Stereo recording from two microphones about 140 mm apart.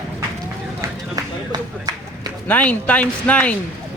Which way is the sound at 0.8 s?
25° right (ahead or behind).